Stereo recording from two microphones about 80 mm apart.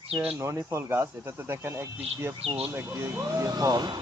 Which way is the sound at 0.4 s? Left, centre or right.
Right.